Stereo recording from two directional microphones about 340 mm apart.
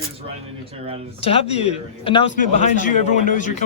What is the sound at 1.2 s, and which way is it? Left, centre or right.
A man's voice, centre.